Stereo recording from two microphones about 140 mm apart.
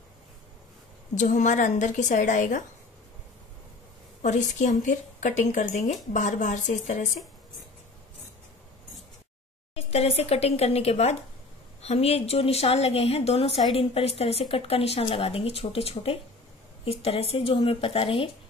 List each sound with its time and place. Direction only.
1.1 s speech: 60° left (ahead or behind)
4.2 s speech: 60° left (ahead or behind)
9.8 s speech: 45° left (ahead or behind)